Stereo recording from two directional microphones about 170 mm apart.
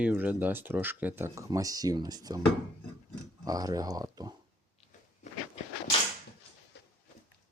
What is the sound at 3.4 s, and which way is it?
Speech, 20° right (ahead or behind).